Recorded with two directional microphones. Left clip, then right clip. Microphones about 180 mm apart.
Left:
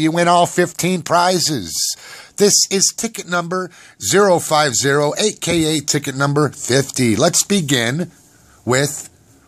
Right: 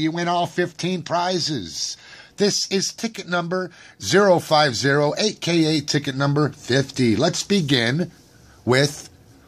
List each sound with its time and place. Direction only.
0.0 s speech: 55° left (ahead or behind); by 9.0 s 15° left (ahead or behind)